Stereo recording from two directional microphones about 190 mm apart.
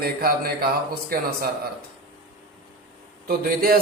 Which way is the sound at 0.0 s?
50° right (ahead or behind).